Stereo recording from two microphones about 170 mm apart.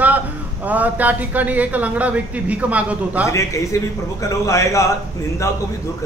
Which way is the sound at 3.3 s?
20° left (ahead or behind).